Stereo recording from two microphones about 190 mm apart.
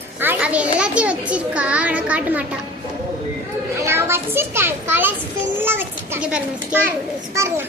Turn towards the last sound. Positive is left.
turn(degrees=-15)  # may be behind; listen again after turning